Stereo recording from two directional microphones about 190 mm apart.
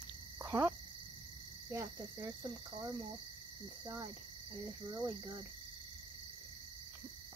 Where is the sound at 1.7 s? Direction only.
20° right (ahead or behind).